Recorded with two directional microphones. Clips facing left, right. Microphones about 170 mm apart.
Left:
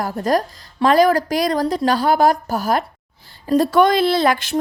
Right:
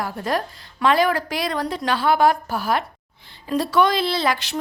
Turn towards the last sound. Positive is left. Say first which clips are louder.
# left 6 dB
turn(degrees=50)  # may be behind; listen again after turning